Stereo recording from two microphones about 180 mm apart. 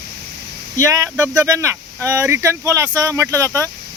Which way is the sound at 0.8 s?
20° right (ahead or behind).